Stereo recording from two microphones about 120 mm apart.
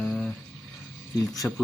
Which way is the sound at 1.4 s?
15° left (ahead or behind).